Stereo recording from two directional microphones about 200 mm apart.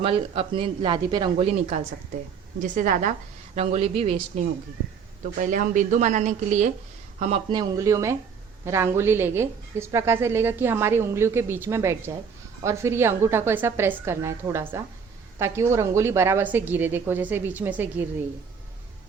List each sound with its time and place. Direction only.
0.0 s a man's voice: 25° right (ahead or behind)
2.6 s a woman's voice: 40° right (ahead or behind)
5.4 s a woman's voice: 40° right (ahead or behind)
7.5 s a woman's voice: 15° right (ahead or behind)